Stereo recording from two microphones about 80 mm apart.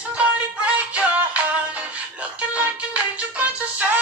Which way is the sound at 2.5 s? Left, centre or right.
Centre.